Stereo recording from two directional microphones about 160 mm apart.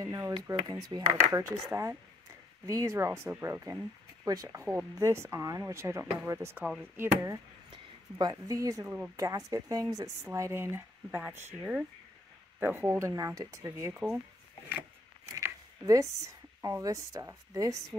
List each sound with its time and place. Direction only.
0.0 s speech: 20° right (ahead or behind)
6.6 s speech: 5° right (ahead or behind)
7.7 s speech: 25° right (ahead or behind)
14.7 s a sound: 10° right (ahead or behind)
15.3 s speech: 20° right (ahead or behind)